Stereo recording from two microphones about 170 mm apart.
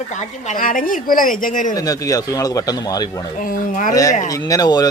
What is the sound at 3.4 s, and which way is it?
Speech, 55° left (ahead or behind).